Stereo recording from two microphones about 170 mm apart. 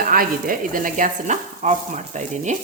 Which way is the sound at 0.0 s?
60° right (ahead or behind).